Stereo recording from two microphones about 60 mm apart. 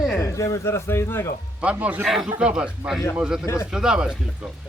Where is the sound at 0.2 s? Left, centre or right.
Left.